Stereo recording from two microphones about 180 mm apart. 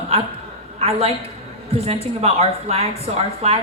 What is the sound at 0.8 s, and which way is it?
A woman's voice, 35° right (ahead or behind).